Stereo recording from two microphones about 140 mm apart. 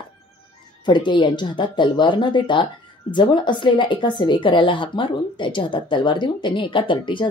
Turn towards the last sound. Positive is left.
turn(degrees=35)  # may be behind; listen again after turning